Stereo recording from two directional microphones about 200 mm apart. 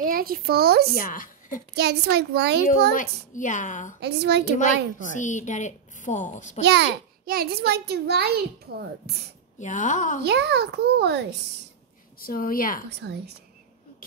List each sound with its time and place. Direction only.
0.0 s a child's voice: 45° right (ahead or behind)
0.9 s a woman's voice: 45° left (ahead or behind)
1.8 s a child's voice: 55° right (ahead or behind)
2.9 s a woman's voice: 40° left (ahead or behind)
4.0 s a child's voice: 55° right (ahead or behind)
5.0 s a woman's voice: 40° left (ahead or behind)
6.6 s a child's voice: 55° right (ahead or behind)
9.6 s a woman's voice: 40° left (ahead or behind)
10.2 s a child's voice: 55° right (ahead or behind)
12.2 s a woman's voice: 45° left (ahead or behind)
13.0 s a child's voice: 60° right (ahead or behind)